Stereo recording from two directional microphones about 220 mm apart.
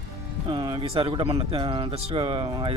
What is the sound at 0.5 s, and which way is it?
Speech, 25° right (ahead or behind).